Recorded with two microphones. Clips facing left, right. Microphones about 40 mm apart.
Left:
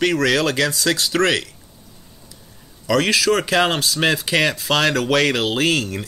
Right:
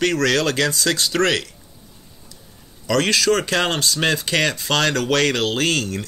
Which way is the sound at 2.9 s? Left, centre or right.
Centre.